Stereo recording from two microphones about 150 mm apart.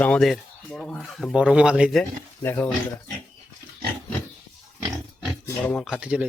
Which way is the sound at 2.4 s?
15° left (ahead or behind).